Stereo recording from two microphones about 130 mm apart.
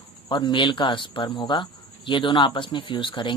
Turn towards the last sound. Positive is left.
turn(degrees=40)  # may be behind; listen again after turning